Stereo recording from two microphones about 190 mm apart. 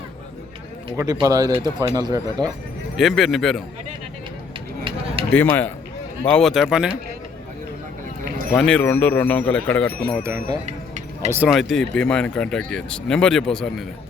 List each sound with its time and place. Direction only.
0.9 s speech: 20° right (ahead or behind)
3.0 s speech: centre (ahead or behind)
4.8 s a sound: 25° right (ahead or behind)
5.3 s speech: 10° left (ahead or behind)
8.5 s speech: 5° left (ahead or behind)
10.2 s speech: 15° right (ahead or behind)
10.7 s music: 35° right (ahead or behind)
11.3 s speech: 5° right (ahead or behind)